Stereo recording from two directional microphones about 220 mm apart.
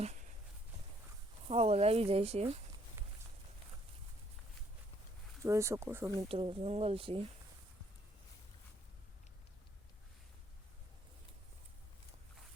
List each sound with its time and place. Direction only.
1.5 s speech: 25° right (ahead or behind)
5.4 s speech: 15° right (ahead or behind)
6.1 s speech: 25° right (ahead or behind)